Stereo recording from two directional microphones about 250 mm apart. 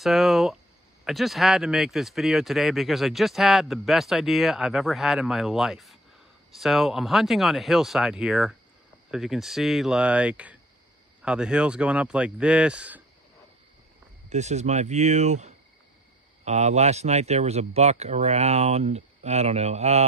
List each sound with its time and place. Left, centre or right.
0.0 s speech: centre
14.3 s speech: right